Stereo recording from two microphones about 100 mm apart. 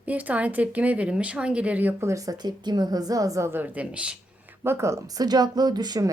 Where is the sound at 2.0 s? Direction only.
35° right (ahead or behind); by 4.1 s 15° right (ahead or behind).